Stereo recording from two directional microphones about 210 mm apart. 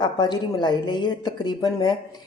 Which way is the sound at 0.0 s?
20° left (ahead or behind).